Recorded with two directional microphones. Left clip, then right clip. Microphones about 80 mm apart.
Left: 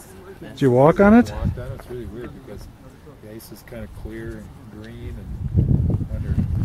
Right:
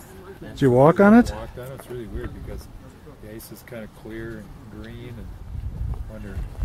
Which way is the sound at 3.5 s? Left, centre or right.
Centre.